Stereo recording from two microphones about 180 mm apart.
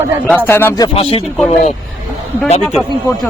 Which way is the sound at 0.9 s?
30° left (ahead or behind).